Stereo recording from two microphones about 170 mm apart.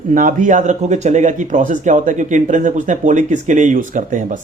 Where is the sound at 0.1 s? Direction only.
50° right (ahead or behind).